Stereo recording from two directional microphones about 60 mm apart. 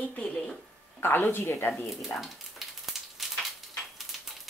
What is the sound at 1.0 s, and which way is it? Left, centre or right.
Speech, left.